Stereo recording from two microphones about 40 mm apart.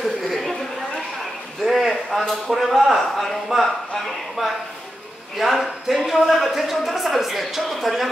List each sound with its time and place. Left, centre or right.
0.2 s chatter: centre
1.6 s a sound: centre
2.2 s speech: centre